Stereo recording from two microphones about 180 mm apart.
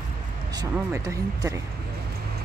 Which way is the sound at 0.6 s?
15° right (ahead or behind).